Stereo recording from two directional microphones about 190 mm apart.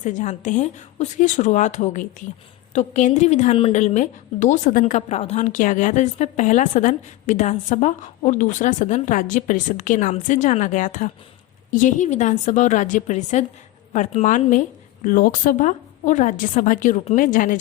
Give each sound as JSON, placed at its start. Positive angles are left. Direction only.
{"t": 0.0, "sound": "a woman's voice", "side_deg": 40}